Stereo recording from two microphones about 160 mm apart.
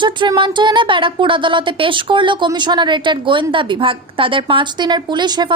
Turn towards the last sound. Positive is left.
turn(degrees=-25)  # may be behind; listen again after turning